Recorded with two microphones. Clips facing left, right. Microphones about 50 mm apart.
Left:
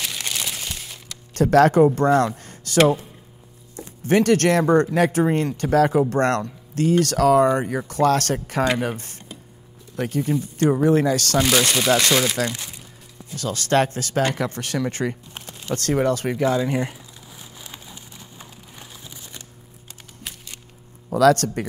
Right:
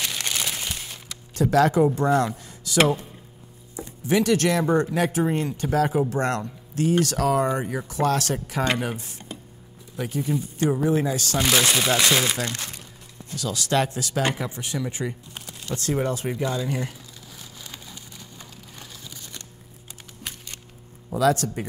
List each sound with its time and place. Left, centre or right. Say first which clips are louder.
0.0 s crumpling: even; centre
1.3 s speech: left 4 dB; left
2.3 s a sound: left 3 dB; left
4.1 s speech: left 4 dB; left
11.3 s speech: even; centre
13.4 s speech: left 4 dB; left
15.0 s a sound: left 4 dB; left
15.7 s speech: left 4 dB; left
16.4 s speech: left 8 dB; centre
17.4 s a sound: left 1 dB; centre
21.1 s speech: left 5 dB; left